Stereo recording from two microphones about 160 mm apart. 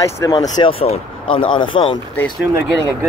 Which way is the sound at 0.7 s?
35° left (ahead or behind).